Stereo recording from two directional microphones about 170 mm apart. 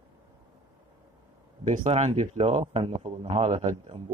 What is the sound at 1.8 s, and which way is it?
Speech, 40° right (ahead or behind).